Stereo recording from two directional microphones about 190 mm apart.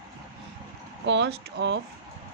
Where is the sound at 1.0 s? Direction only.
70° right (ahead or behind).